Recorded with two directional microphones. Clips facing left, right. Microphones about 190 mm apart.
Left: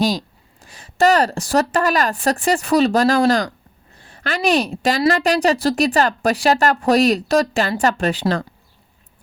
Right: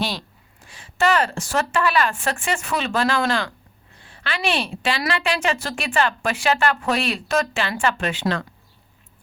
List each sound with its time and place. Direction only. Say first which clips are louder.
0.0 s a woman's voice: left 8 dB; 40° left (ahead or behind)